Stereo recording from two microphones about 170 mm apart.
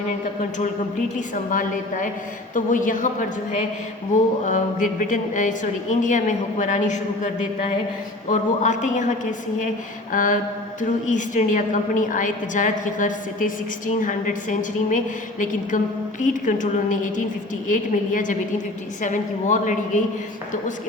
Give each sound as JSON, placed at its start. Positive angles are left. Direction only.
{"t": 0.6, "sound": "a woman's voice", "side_deg": 50}
{"t": 4.4, "sound": "a woman's voice", "side_deg": 50}
{"t": 8.3, "sound": "a woman's voice", "side_deg": 45}
{"t": 10.1, "sound": "mantra", "side_deg": 50}
{"t": 10.8, "sound": "a woman's voice", "side_deg": 45}